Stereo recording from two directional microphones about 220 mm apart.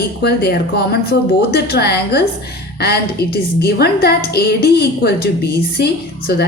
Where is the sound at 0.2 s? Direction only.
45° left (ahead or behind).